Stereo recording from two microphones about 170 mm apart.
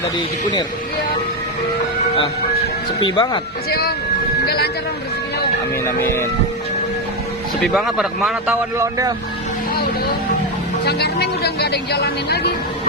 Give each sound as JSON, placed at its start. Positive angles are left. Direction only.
{"t": 3.0, "sound": "speech", "side_deg": 25}
{"t": 3.7, "sound": "speech", "side_deg": 65}
{"t": 5.8, "sound": "speech", "side_deg": 15}
{"t": 7.6, "sound": "speech", "side_deg": 0}
{"t": 8.8, "sound": "speech", "side_deg": -20}
{"t": 10.8, "sound": "speech", "side_deg": 70}